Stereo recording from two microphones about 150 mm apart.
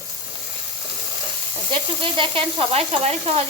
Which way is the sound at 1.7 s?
35° right (ahead or behind).